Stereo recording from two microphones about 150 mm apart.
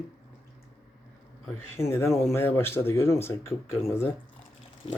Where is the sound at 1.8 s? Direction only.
15° left (ahead or behind).